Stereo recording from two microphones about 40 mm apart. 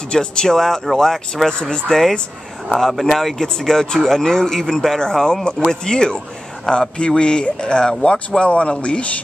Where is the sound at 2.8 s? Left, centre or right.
Centre.